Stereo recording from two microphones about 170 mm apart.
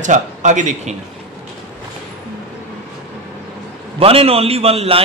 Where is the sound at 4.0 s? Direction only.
35° right (ahead or behind).